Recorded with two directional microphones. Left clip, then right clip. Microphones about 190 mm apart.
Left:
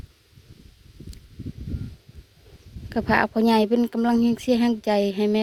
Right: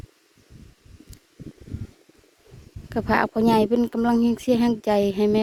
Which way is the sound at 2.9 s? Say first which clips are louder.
Left 1 dB; 20° right (ahead or behind).